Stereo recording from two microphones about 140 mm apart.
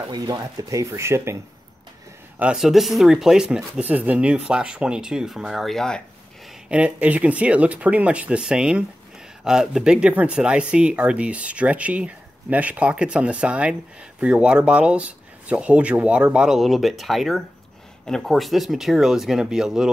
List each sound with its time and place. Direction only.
0.0 s speech: 30° right (ahead or behind)
2.3 s speech: 5° right (ahead or behind)
6.7 s speech: 10° right (ahead or behind)